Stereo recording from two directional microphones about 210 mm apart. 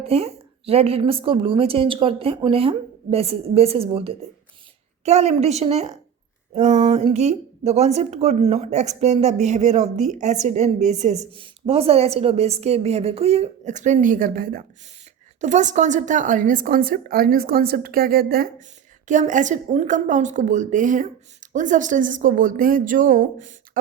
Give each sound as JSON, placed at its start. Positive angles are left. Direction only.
{"t": 0.0, "sound": "a woman's voice", "side_deg": -30}